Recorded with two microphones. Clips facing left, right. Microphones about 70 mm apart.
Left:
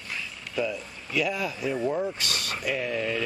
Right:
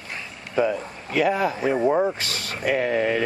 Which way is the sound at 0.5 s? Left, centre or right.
Right.